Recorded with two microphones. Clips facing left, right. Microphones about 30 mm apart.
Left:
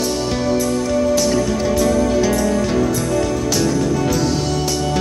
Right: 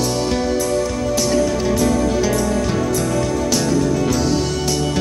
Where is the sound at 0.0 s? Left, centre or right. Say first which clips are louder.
Even; centre.